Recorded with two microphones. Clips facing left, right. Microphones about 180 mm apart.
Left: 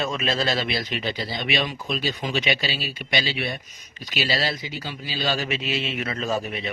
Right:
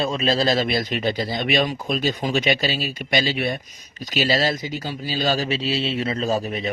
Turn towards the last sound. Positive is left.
turn(degrees=-40)  # may be behind; listen again after turning